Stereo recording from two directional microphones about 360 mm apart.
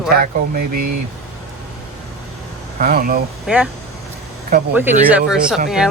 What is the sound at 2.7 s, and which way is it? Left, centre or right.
Speech, right.